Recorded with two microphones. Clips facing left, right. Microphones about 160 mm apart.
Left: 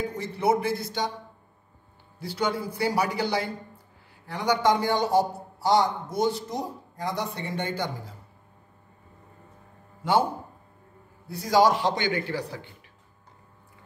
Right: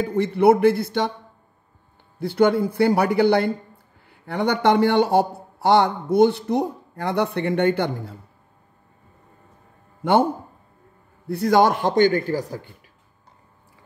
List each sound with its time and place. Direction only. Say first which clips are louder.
0.1 s a man's voice: right 12 dB; 60° right (ahead or behind)
2.1 s a man's voice: right 10 dB; 55° right (ahead or behind)
11.2 s a man's voice: right 4 dB; 60° right (ahead or behind); by 12.6 s 45° right (ahead or behind)